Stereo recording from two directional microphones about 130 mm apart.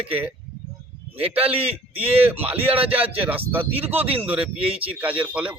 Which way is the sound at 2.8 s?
15° right (ahead or behind).